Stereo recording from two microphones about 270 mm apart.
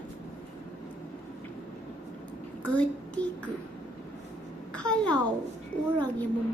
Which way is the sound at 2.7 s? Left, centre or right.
Centre.